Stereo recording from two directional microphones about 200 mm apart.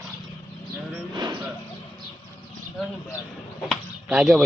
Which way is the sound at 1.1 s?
20° right (ahead or behind).